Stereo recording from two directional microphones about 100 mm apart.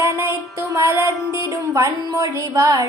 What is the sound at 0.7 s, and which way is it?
Music, 25° right (ahead or behind).